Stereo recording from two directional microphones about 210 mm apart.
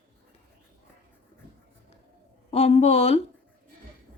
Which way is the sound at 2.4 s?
30° left (ahead or behind).